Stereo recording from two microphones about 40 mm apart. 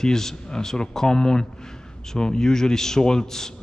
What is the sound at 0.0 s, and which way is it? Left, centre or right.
A man's voice, centre.